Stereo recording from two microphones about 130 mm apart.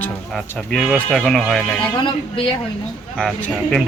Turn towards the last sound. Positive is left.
turn(degrees=10)  # may be behind; listen again after turning